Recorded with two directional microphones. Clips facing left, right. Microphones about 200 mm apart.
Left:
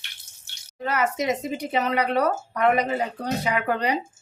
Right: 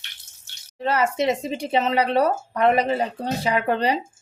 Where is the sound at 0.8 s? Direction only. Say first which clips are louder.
Right 3 dB; 30° right (ahead or behind).